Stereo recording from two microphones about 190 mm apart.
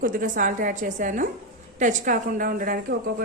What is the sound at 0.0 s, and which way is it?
A woman's voice, 45° right (ahead or behind).